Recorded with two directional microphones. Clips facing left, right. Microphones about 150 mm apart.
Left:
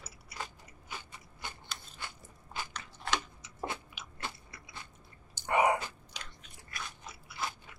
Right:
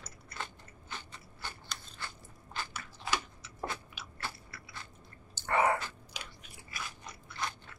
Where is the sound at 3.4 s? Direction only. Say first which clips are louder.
Left 1 dB; 20° left (ahead or behind).